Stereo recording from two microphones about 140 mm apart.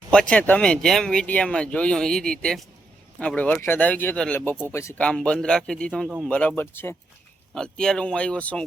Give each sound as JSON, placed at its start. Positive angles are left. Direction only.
{"t": 0.1, "sound": "speech", "side_deg": 5}
{"t": 4.9, "sound": "speech", "side_deg": 10}
{"t": 7.5, "sound": "speech", "side_deg": 5}